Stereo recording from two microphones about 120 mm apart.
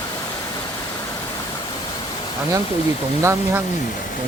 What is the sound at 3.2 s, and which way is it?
Speech, 20° right (ahead or behind).